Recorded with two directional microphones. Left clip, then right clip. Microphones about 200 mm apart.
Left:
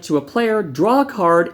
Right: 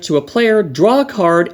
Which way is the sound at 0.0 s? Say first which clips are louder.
Right 5 dB; 30° right (ahead or behind).